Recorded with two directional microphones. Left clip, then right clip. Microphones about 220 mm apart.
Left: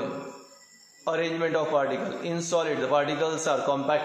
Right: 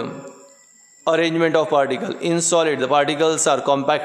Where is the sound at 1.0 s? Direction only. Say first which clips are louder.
Right 9 dB; 55° right (ahead or behind).